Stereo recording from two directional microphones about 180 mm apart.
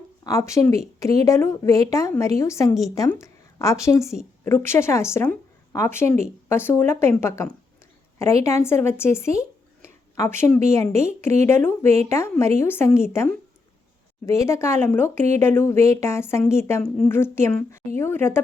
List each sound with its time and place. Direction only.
0.3 s a woman's voice: 15° left (ahead or behind)
8.4 s a woman's voice: 15° left (ahead or behind)